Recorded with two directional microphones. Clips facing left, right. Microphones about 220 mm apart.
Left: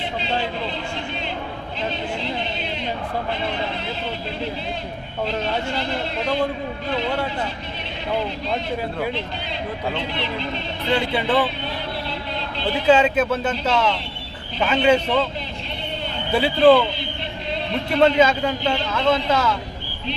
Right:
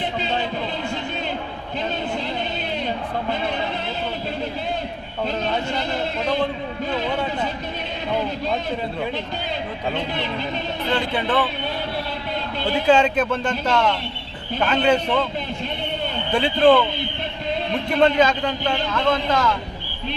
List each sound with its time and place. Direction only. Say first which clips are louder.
10.9 s a man's voice: left 2 dB; 10° left (ahead or behind)
12.9 s a man's voice: left 1 dB; 5° left (ahead or behind)
16.3 s a man's voice: left 1 dB; 5° left (ahead or behind)
18.0 s a man's voice: left 1 dB; 5° left (ahead or behind)